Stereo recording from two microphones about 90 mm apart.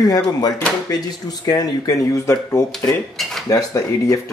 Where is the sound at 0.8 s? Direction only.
45° left (ahead or behind).